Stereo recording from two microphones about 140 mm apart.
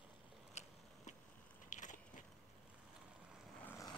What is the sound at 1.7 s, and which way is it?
Crushing, 60° left (ahead or behind).